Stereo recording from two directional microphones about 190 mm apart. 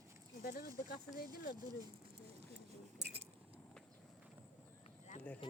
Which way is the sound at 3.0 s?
60° right (ahead or behind).